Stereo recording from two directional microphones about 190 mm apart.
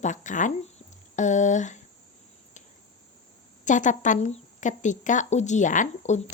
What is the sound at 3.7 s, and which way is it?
Speech, 40° left (ahead or behind).